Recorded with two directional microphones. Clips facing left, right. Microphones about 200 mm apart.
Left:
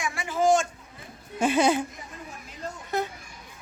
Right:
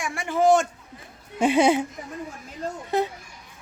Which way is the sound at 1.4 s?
25° right (ahead or behind).